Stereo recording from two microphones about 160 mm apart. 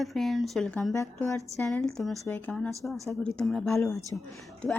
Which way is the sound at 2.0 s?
Centre (ahead or behind).